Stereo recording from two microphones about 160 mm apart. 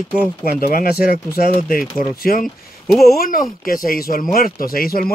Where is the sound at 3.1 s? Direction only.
60° left (ahead or behind).